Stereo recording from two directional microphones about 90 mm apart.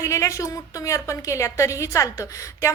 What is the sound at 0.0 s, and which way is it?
A man's voice, 35° left (ahead or behind).